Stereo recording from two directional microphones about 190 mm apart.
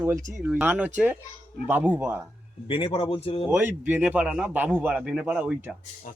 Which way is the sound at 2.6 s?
30° left (ahead or behind).